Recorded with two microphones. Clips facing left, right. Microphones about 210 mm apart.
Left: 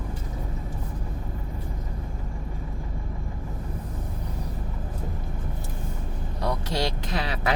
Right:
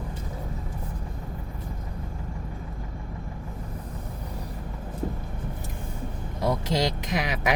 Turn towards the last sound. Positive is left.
turn(degrees=-15)  # may be behind; listen again after turning